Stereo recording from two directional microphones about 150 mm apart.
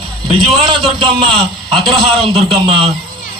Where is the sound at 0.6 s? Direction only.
30° right (ahead or behind).